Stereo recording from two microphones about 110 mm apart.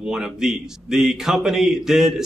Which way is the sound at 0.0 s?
5° right (ahead or behind).